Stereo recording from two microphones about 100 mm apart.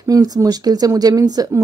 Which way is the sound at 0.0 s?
35° right (ahead or behind).